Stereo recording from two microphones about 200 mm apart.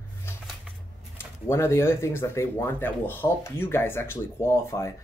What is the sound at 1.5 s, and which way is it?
Speech, 10° left (ahead or behind).